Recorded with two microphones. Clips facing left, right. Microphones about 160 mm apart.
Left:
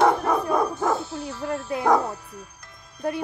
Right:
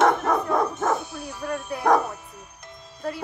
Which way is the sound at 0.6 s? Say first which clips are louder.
Even; 20° right (ahead or behind).